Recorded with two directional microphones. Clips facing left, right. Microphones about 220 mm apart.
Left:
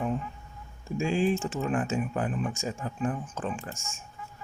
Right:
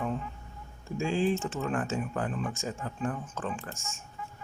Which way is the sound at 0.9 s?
15° left (ahead or behind).